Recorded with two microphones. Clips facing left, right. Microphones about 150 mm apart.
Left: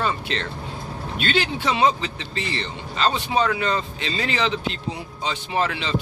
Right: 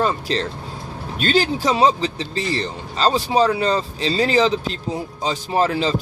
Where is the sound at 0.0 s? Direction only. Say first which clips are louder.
Right 5 dB; 35° right (ahead or behind).